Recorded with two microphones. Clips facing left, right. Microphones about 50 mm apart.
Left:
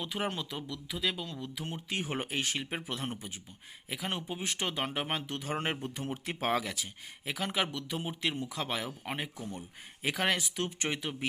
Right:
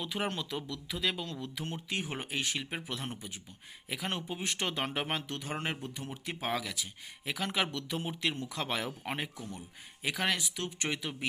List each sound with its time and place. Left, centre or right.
0.0 s speech: centre
1.9 s speech: left
2.6 s speech: centre
3.8 s speech: centre
4.6 s speech: centre
5.8 s speech: left
7.3 s speech: centre
8.3 s speech: centre
8.5 s speech: centre
9.4 s speech: left